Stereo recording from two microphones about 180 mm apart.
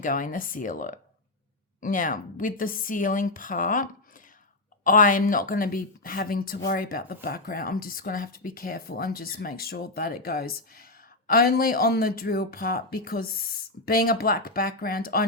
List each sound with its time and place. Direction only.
0.0 s a woman's voice: 50° left (ahead or behind)